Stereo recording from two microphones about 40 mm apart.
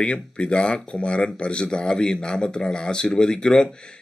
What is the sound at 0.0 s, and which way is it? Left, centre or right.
A man's voice, left.